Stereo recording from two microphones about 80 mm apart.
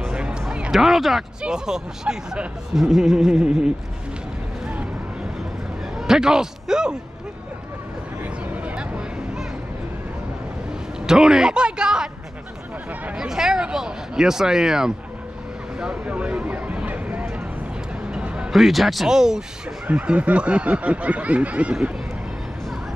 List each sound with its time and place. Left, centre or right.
0.0 s music: centre
0.7 s speech: centre
5.9 s a man's voice: centre
8.6 s a sound: centre
11.1 s snicker: centre
15.8 s a sound: centre
18.5 s speech: centre
19.9 s snicker: centre